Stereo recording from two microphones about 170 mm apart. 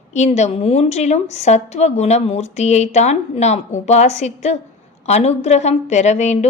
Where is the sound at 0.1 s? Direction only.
40° left (ahead or behind).